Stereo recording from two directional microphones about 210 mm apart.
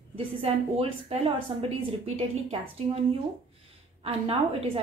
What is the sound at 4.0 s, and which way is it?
Speech, 30° right (ahead or behind).